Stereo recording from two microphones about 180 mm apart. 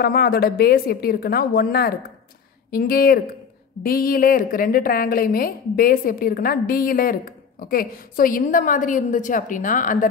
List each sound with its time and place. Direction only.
0.0 s a woman's voice: 60° left (ahead or behind)